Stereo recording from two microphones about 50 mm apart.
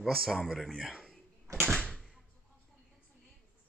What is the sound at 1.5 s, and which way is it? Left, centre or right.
Door, right.